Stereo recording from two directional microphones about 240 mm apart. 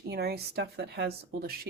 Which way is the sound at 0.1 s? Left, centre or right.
Right.